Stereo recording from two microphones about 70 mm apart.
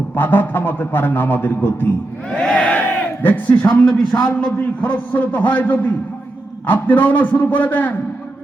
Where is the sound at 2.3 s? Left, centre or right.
Centre.